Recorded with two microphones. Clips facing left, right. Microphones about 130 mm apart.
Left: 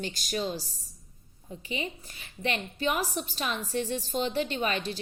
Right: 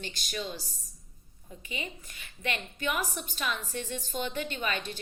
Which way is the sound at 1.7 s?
35° left (ahead or behind).